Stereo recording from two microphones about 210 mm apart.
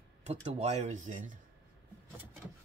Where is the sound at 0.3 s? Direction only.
25° right (ahead or behind).